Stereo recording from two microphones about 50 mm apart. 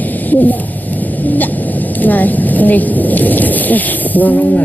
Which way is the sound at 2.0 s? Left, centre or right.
Left.